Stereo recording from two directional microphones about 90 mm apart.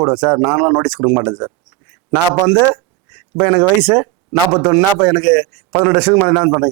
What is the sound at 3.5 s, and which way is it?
A man's voice, 10° right (ahead or behind).